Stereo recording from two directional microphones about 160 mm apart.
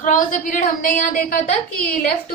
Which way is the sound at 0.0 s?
55° left (ahead or behind).